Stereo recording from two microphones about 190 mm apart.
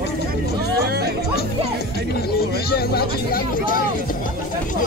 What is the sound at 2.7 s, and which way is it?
Speech, 55° left (ahead or behind).